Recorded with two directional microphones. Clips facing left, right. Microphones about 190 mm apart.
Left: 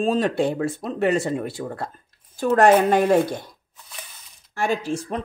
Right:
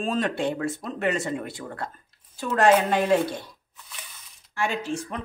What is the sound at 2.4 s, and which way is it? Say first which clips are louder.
Speech: left 4 dB; 45° left (ahead or behind).